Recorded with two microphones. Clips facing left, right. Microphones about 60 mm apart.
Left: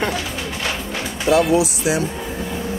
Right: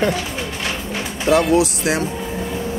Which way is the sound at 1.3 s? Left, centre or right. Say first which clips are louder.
Right 1 dB; right.